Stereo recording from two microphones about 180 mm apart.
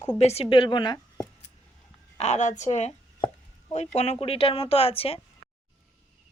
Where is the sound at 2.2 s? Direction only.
40° left (ahead or behind).